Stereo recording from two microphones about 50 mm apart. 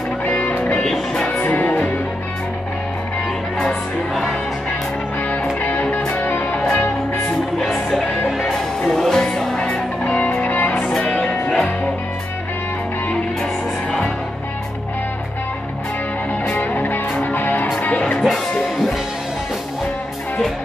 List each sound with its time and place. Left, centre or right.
0.2 s music: left
0.8 s music: centre
1.4 s music: left
5.6 s music: left
6.6 s music: left
7.5 s music: centre
9.6 s music: left
10.8 s music: centre
16.4 s music: left